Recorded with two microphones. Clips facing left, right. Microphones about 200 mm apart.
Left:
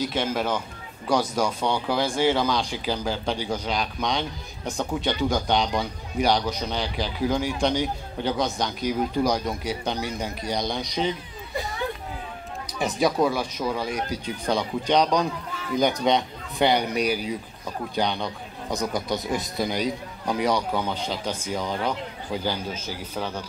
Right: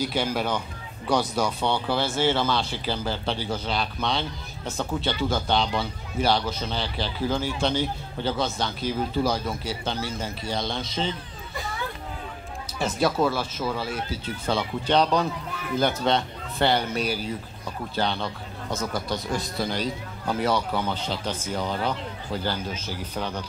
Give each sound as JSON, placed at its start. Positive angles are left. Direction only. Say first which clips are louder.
{"t": 0.0, "sound": "a man's voice", "louder": "even", "side_deg": -5}
{"t": 0.3, "sound": "a man's voice", "louder": "left 1 dB", "side_deg": 5}
{"t": 12.7, "sound": "speech", "louder": "left 1 dB", "side_deg": 15}